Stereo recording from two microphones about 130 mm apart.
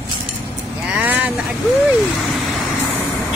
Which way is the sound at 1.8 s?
Centre (ahead or behind).